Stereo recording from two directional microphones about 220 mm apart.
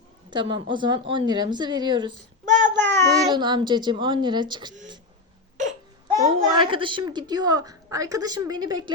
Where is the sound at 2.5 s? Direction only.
35° right (ahead or behind).